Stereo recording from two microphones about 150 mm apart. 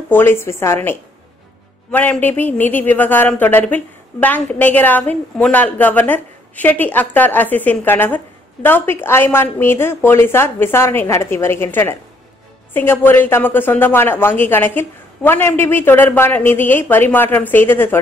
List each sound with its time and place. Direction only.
0.1 s a man's voice: 15° left (ahead or behind)